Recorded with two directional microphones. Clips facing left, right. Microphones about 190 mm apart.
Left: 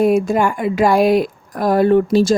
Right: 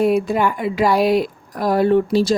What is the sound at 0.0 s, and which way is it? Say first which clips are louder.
A woman's voice: left 2 dB; 45° left (ahead or behind).